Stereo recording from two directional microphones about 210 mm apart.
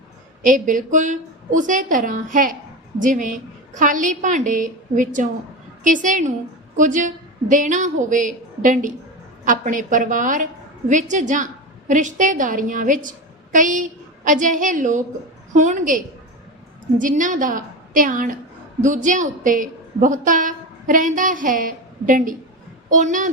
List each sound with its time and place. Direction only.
0.4 s a woman's voice: 40° right (ahead or behind)